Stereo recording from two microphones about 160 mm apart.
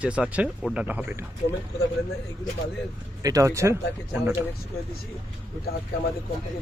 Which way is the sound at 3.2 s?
20° right (ahead or behind).